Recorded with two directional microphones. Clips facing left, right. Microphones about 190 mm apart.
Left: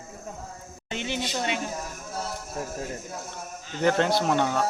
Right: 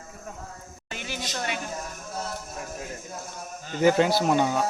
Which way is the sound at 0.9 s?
20° left (ahead or behind).